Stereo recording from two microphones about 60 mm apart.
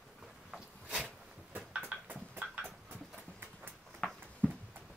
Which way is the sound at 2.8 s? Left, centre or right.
Right.